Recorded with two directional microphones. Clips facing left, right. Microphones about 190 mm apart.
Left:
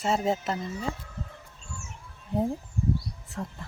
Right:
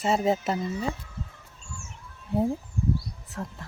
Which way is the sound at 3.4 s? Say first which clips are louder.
Even; centre (ahead or behind).